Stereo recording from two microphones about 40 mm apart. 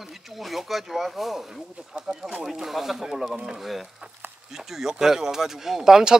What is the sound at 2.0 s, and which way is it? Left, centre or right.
Speech, centre.